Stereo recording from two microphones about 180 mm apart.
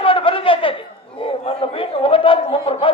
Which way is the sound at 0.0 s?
30° left (ahead or behind).